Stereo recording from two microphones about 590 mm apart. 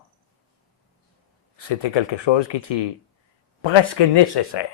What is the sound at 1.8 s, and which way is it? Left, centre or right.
Speech, left.